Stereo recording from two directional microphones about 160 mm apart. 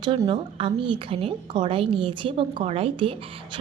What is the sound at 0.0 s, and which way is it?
A woman's voice, 30° right (ahead or behind).